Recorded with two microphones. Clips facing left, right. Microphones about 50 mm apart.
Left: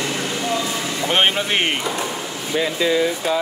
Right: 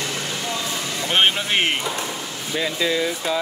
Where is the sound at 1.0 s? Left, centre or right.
Centre.